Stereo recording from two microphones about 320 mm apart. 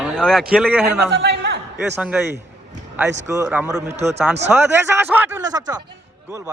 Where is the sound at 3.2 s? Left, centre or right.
Centre.